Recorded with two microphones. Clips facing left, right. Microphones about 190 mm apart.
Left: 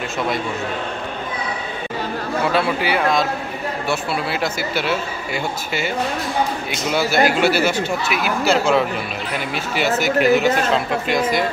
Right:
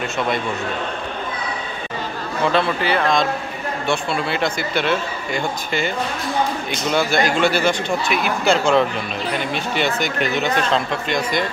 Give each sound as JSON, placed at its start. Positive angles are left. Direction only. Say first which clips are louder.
{"t": 2.5, "sound": "speech", "louder": "right 1 dB", "side_deg": 10}